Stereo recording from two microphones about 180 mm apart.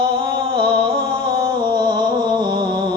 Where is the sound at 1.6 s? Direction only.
25° right (ahead or behind).